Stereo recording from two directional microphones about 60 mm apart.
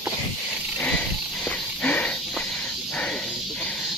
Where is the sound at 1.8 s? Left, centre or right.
Left.